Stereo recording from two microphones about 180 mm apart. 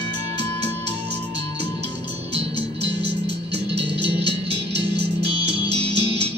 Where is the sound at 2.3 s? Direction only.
35° right (ahead or behind).